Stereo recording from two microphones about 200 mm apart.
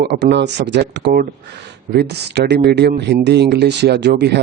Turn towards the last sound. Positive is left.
turn(degrees=-55)  # may be behind; listen again after turning